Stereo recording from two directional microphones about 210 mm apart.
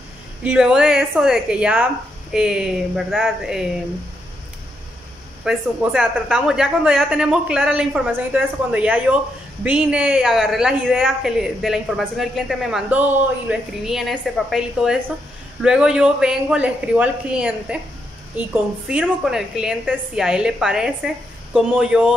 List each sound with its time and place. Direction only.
0.4 s a woman's voice: 5° right (ahead or behind)
5.4 s a woman's voice: 5° right (ahead or behind)
18.9 s a woman's voice: 5° right (ahead or behind)